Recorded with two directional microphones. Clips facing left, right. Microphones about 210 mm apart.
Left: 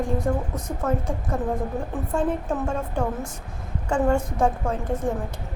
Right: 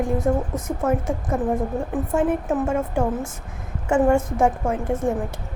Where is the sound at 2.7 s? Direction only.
25° right (ahead or behind).